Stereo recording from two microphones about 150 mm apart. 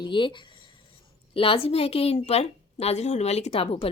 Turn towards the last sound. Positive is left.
turn(degrees=40)  # may be behind; listen again after turning